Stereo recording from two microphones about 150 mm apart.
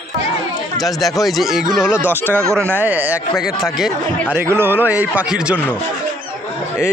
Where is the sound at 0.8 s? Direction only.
Centre (ahead or behind).